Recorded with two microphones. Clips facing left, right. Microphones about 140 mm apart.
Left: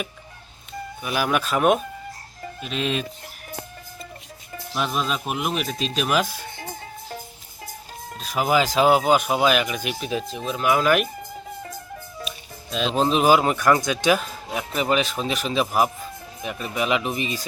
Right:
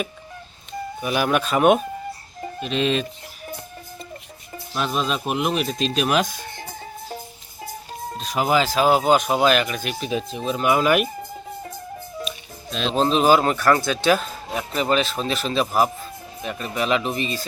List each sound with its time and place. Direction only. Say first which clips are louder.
1.0 s speech: right 2 dB; centre (ahead or behind)
4.7 s speech: right 1 dB; 10° left (ahead or behind)
8.2 s a man's voice: even; 5° left (ahead or behind)
8.7 s speech: left 2 dB; 20° left (ahead or behind)
9.0 s speech: right 1 dB; 10° left (ahead or behind)
12.7 s a man's voice: right 1 dB; 5° left (ahead or behind)